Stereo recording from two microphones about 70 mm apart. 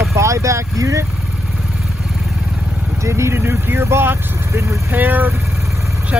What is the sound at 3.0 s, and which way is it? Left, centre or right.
Speech, right.